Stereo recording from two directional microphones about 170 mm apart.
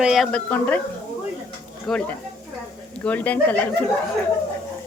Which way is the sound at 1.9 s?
Centre (ahead or behind).